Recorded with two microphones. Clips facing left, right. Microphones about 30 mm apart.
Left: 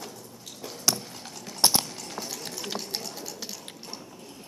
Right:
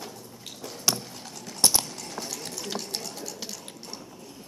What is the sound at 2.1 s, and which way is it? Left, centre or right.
Run, centre.